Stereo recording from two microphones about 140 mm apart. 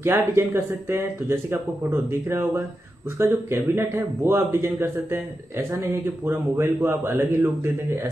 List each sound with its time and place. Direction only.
0.0 s a man's voice: 20° right (ahead or behind)